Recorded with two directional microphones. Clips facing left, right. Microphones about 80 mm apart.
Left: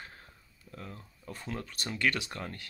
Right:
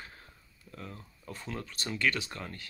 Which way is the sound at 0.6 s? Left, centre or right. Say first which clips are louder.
Even; left.